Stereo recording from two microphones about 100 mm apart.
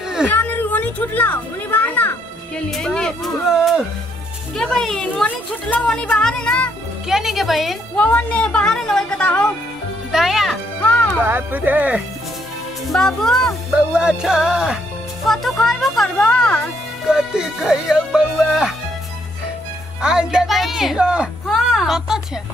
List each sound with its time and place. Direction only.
0.3 s a child's voice: 20° left (ahead or behind)
7.1 s music: 5° right (ahead or behind)
7.9 s a woman's voice: 15° left (ahead or behind)
10.1 s music: 5° right (ahead or behind)
10.8 s music: 15° left (ahead or behind)
11.2 s speech: 20° right (ahead or behind)
12.8 s music: 5° left (ahead or behind)
15.2 s speech: centre (ahead or behind)
17.1 s music: 5° right (ahead or behind)
20.0 s speech: 5° right (ahead or behind)